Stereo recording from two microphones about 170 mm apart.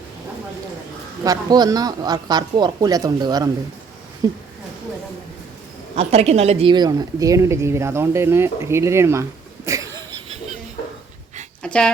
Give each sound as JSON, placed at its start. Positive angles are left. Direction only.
{"t": 1.2, "sound": "speech", "side_deg": -20}
{"t": 6.0, "sound": "a woman's voice", "side_deg": -35}
{"t": 9.6, "sound": "wheeze", "side_deg": -20}
{"t": 11.6, "sound": "dog", "side_deg": 5}